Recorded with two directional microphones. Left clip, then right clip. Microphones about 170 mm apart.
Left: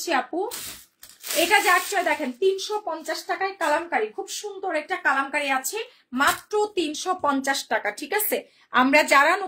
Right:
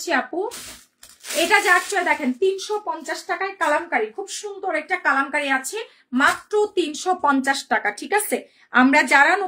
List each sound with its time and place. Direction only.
0.0 s speech: 20° right (ahead or behind)
1.5 s speech: 25° right (ahead or behind)